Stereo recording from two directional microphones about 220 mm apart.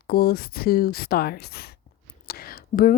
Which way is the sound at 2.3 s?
45° left (ahead or behind).